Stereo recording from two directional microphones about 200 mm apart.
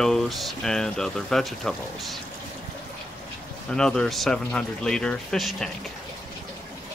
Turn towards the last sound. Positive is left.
turn(degrees=0)  # may be behind; listen again after turning